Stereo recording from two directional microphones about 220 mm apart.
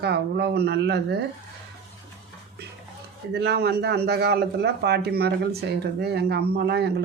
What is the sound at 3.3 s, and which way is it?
Speech, 50° right (ahead or behind).